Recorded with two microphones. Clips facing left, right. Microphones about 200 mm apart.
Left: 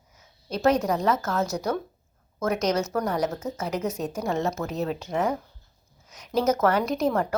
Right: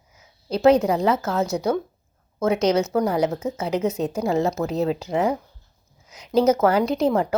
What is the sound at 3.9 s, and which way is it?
A woman's voice, 30° right (ahead or behind).